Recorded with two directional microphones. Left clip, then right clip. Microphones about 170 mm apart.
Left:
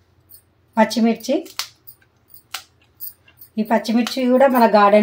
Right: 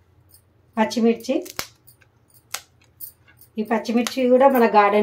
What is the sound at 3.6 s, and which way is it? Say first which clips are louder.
Speech: left 3 dB; 50° left (ahead or behind).